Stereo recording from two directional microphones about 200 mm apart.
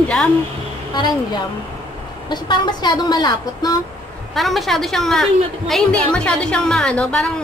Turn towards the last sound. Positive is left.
turn(degrees=5)  # may be behind; listen again after turning